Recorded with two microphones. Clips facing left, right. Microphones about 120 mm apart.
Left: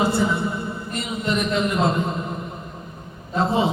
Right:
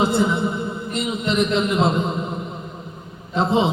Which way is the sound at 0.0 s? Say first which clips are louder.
Right 2 dB; 20° right (ahead or behind).